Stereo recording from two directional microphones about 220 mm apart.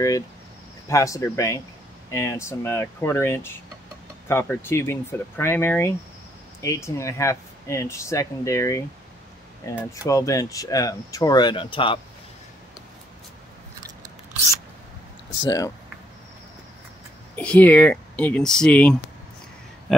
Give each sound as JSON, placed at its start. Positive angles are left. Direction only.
{"t": 0.8, "sound": "speech", "side_deg": 15}
{"t": 15.4, "sound": "speech", "side_deg": 15}
{"t": 17.4, "sound": "speech", "side_deg": 5}